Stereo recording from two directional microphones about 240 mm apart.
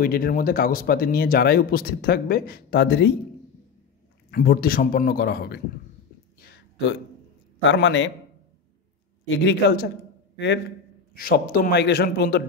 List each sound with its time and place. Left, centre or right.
0.0 s speech: left
4.3 s speech: left
6.4 s a sound: left
7.6 s a man's voice: left
9.4 s a man's voice: left